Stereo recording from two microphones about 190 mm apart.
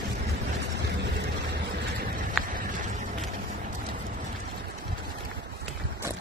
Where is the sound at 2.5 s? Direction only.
45° right (ahead or behind).